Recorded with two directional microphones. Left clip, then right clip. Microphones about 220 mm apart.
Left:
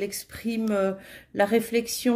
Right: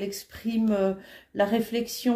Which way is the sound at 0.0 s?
30° left (ahead or behind).